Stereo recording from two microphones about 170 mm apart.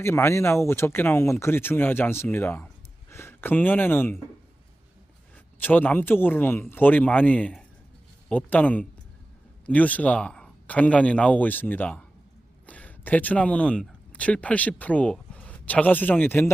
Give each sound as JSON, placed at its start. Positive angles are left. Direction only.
{"t": 0.0, "sound": "speech", "side_deg": 15}
{"t": 5.5, "sound": "speech", "side_deg": 10}